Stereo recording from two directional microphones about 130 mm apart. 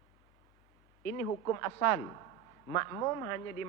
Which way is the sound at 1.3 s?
25° left (ahead or behind).